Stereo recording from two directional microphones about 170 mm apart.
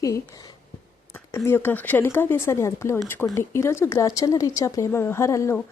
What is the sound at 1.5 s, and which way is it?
Speech, 10° left (ahead or behind).